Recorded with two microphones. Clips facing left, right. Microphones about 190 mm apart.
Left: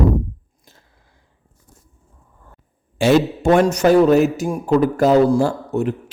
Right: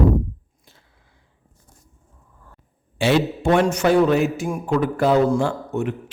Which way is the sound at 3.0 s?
45° left (ahead or behind).